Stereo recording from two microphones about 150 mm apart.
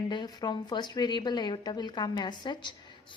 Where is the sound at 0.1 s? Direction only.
30° left (ahead or behind).